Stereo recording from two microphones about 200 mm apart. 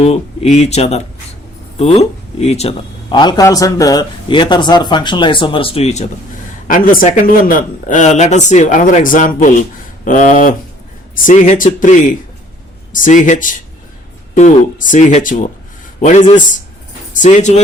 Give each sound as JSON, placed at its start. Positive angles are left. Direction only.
{"t": 0.0, "sound": "speech", "side_deg": 30}
{"t": 6.7, "sound": "a man's voice", "side_deg": 45}